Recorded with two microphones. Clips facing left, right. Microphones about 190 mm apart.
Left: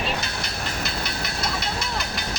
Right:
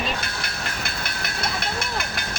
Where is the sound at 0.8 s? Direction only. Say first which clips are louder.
Left 2 dB; 55° right (ahead or behind).